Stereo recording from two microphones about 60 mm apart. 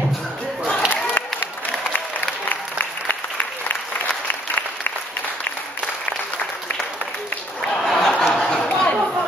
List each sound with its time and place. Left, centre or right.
0.8 s crowd: left
2.5 s applause: left
7.8 s a sound: centre
8.4 s chatter: centre